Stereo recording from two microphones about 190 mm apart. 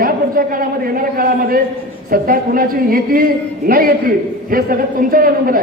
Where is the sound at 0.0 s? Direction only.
50° right (ahead or behind).